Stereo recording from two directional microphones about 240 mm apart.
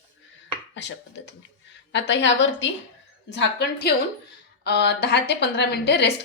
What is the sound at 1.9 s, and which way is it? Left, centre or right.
A woman's voice, left.